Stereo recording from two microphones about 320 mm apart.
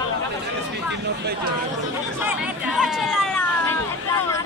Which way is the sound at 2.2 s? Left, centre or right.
Centre.